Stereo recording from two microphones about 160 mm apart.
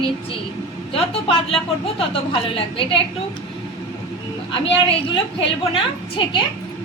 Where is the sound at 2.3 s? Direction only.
35° left (ahead or behind).